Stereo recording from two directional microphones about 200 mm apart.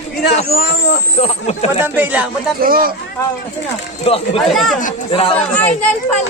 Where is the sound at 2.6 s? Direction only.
45° right (ahead or behind).